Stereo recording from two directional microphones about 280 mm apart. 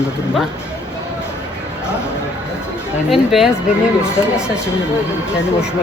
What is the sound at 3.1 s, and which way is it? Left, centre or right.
Speech, centre.